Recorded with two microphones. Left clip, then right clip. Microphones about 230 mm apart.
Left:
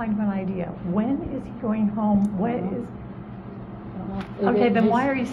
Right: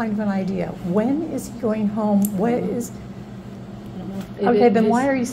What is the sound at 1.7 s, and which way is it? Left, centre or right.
Speech, right.